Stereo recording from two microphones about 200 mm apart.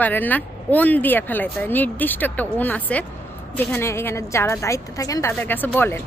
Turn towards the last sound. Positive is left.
turn(degrees=10)  # may be behind; listen again after turning